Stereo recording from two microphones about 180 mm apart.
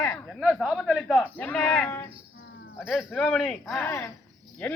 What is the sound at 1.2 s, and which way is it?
Speech, 10° left (ahead or behind).